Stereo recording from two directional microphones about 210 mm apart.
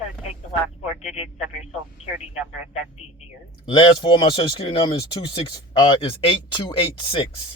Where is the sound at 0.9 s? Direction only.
30° left (ahead or behind).